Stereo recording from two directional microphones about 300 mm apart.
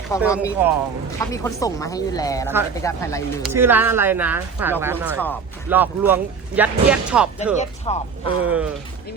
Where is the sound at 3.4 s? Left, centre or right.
Centre.